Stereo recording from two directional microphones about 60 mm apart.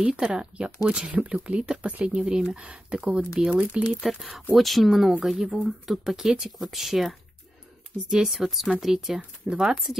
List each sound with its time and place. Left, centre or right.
0.0 s speech: centre
4.0 s speech: centre